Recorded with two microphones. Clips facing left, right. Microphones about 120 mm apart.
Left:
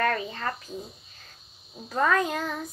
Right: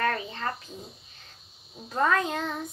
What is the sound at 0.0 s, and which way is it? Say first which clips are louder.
Speech: left 2 dB; 30° right (ahead or behind).